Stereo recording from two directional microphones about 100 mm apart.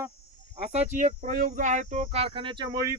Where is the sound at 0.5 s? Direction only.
90° right.